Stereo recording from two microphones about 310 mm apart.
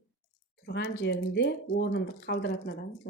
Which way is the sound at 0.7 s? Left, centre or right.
Left.